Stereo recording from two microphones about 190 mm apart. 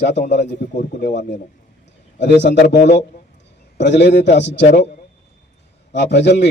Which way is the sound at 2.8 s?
40° left (ahead or behind).